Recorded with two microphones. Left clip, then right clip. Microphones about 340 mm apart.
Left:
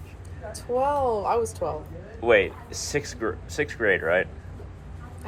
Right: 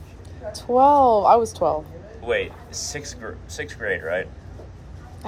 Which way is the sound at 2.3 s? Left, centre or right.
Centre.